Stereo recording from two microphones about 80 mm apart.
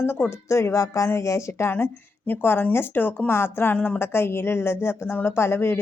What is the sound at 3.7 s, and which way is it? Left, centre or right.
Speech, centre.